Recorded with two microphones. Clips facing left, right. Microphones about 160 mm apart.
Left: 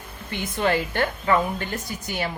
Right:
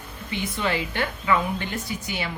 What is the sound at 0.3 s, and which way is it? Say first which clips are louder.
Speech: left 3 dB; 50° left (ahead or behind).